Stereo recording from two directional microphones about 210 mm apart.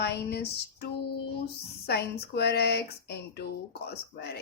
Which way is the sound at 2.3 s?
50° left (ahead or behind).